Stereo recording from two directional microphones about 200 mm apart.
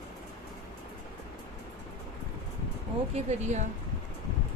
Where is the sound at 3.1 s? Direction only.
35° right (ahead or behind).